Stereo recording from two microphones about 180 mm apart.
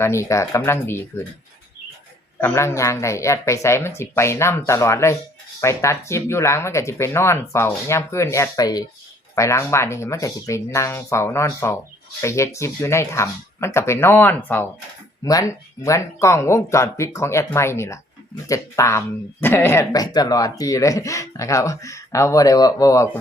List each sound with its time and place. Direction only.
0.0 s speech: 15° left (ahead or behind)
2.4 s speech: 15° left (ahead or behind)